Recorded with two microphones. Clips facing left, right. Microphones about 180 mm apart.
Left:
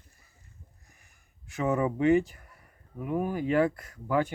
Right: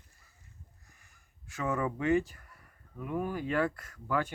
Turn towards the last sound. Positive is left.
turn(degrees=15)  # may be behind; listen again after turning